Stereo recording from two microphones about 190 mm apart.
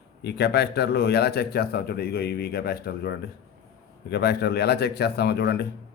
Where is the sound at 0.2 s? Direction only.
60° left (ahead or behind).